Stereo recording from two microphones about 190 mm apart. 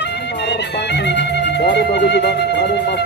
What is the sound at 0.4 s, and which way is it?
Speech, 65° left (ahead or behind).